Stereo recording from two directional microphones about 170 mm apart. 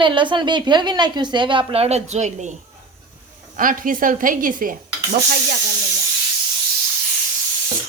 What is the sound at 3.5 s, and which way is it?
A woman's voice, 55° right (ahead or behind).